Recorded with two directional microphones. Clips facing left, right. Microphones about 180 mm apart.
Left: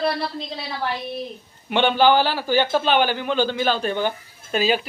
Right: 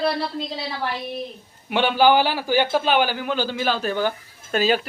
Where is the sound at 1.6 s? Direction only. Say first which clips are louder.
Even; 5° right (ahead or behind).